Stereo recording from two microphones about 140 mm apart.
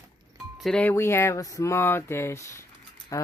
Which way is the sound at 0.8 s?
15° left (ahead or behind).